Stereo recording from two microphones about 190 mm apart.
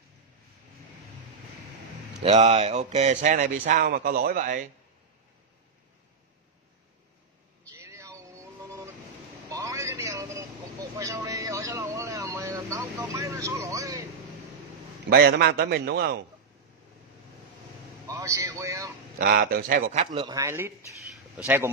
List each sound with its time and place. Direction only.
2.2 s a man's voice: 35° right (ahead or behind)
7.7 s vehicle: 15° right (ahead or behind)
9.5 s a sound: 15° right (ahead or behind)
11.0 s vehicle: 15° right (ahead or behind)
15.0 s a man's voice: 55° right (ahead or behind)
18.0 s a man's voice: 15° right (ahead or behind)
19.1 s a man's voice: 50° right (ahead or behind)
20.1 s a man's voice: 20° right (ahead or behind)